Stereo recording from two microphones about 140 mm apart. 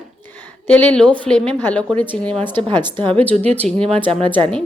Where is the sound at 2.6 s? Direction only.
35° right (ahead or behind).